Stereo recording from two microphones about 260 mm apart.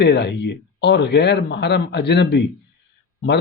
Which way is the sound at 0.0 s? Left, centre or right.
Left.